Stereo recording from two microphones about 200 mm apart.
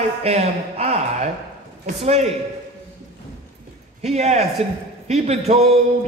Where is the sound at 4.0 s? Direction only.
30° right (ahead or behind).